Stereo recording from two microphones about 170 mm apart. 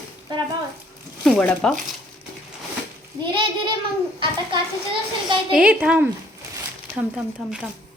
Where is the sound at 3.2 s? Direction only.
30° right (ahead or behind).